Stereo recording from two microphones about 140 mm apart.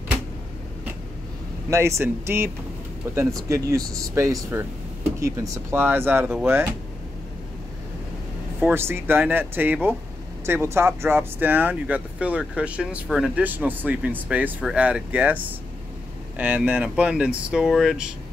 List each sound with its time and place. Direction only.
1.7 s speech: 20° right (ahead or behind)
8.5 s speech: 15° right (ahead or behind)